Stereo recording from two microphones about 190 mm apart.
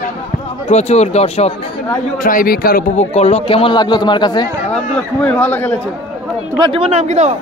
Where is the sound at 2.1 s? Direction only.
45° left (ahead or behind).